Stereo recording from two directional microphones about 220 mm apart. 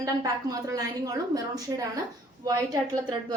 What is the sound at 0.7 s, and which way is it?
A woman's voice, 15° right (ahead or behind).